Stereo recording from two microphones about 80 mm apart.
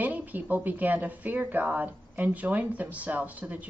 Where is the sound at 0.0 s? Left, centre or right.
Right.